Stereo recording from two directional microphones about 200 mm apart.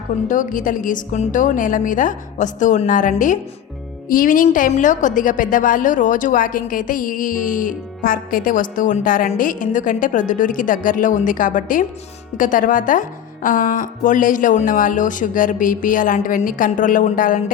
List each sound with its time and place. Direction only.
0.3 s a woman's voice: 40° left (ahead or behind)